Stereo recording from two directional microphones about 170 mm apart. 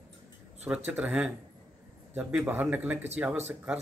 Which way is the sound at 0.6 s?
5° right (ahead or behind).